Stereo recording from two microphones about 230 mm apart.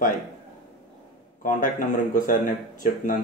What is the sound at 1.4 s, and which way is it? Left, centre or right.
Speech, left.